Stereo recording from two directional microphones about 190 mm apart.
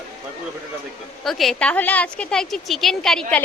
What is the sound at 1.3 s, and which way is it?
A woman's voice, centre (ahead or behind).